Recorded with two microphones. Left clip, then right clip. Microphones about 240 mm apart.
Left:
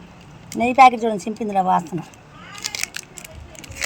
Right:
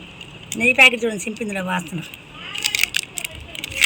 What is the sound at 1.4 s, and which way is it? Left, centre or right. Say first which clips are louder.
Speech: left 10 dB; centre.